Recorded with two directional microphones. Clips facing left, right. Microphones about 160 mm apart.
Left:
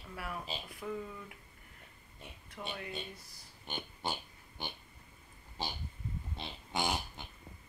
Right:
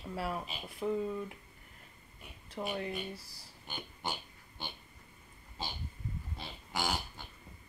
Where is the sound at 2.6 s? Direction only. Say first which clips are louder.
Right 6 dB; 35° right (ahead or behind).